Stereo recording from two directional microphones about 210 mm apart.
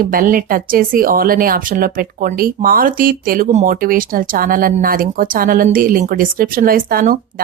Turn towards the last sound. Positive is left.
turn(degrees=-45)  # may be behind; listen again after turning